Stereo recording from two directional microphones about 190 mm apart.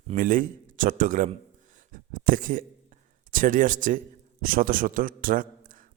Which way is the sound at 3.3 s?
45° right (ahead or behind).